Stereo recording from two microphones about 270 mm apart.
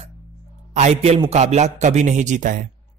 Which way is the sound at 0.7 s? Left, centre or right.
Right.